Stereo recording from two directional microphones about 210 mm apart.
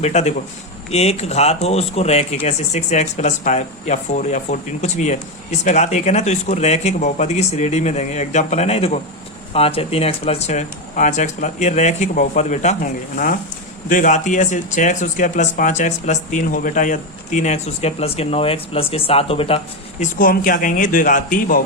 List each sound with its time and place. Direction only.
0.0 s speech: 35° left (ahead or behind)
20.1 s speech: 40° left (ahead or behind)